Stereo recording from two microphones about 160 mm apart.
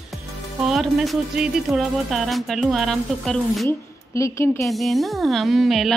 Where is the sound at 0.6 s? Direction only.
Centre (ahead or behind).